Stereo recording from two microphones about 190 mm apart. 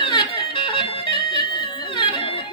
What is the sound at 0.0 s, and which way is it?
Music, 25° left (ahead or behind).